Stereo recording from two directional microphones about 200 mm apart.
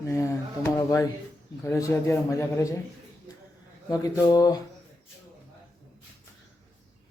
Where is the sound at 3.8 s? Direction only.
15° left (ahead or behind).